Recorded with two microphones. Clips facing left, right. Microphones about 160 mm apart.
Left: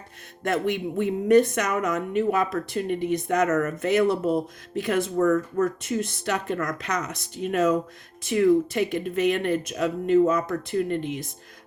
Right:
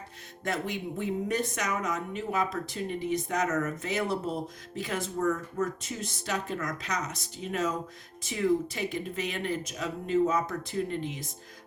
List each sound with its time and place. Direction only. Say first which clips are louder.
0.4 s speech: left 7 dB; 60° left (ahead or behind)